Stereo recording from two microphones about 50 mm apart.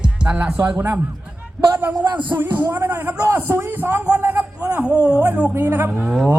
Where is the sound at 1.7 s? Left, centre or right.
Right.